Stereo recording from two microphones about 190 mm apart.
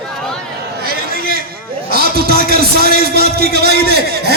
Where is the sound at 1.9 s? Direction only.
55° right (ahead or behind).